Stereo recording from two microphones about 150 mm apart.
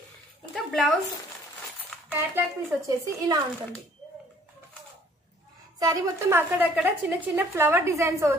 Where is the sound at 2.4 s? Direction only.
15° right (ahead or behind).